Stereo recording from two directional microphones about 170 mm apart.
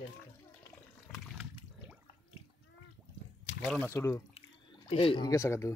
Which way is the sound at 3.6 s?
10° left (ahead or behind).